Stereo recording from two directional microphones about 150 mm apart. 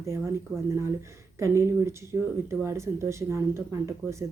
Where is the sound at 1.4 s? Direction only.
20° right (ahead or behind).